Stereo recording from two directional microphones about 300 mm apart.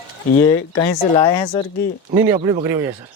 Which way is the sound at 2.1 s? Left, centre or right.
Centre.